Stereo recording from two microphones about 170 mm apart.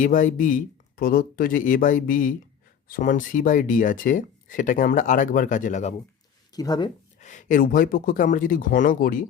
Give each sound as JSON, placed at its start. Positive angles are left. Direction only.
{"t": 0.0, "sound": "speech", "side_deg": 50}
{"t": 6.5, "sound": "speech", "side_deg": 25}
{"t": 7.2, "sound": "speech", "side_deg": 45}